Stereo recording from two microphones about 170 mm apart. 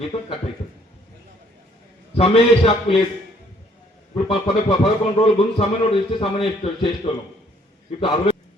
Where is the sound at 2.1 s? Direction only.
35° left (ahead or behind).